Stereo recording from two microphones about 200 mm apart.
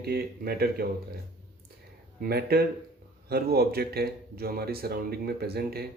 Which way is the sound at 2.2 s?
50° right (ahead or behind).